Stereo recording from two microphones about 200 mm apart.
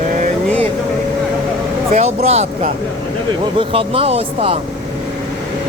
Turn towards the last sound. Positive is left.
turn(degrees=-30)  # may be behind; listen again after turning